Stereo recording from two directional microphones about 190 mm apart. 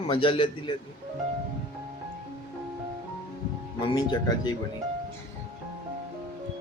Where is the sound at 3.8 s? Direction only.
20° left (ahead or behind).